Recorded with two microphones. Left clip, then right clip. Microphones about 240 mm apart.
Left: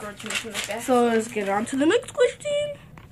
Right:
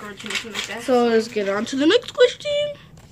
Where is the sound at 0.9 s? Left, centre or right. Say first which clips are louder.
Right 3 dB; centre.